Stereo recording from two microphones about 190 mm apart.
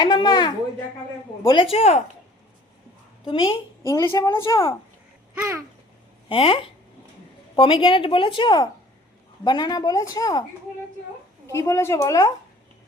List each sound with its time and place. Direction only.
0.0 s a woman's voice: 20° left (ahead or behind)
3.2 s a woman's voice: 25° left (ahead or behind)
5.3 s babbling: 10° right (ahead or behind)
6.2 s a woman's voice: 30° left (ahead or behind)
11.4 s a woman's voice: 15° left (ahead or behind)